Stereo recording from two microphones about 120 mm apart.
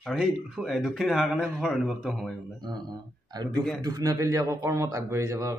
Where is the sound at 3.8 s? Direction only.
30° right (ahead or behind).